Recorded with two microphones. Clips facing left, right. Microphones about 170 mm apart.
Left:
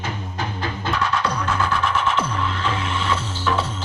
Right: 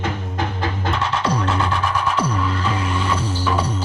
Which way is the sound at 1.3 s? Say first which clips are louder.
Right 2 dB; 20° right (ahead or behind).